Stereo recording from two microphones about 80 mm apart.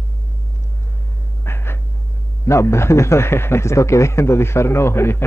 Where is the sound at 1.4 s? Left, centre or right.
Left.